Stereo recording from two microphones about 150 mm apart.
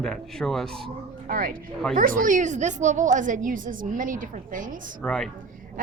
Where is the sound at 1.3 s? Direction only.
70° right (ahead or behind).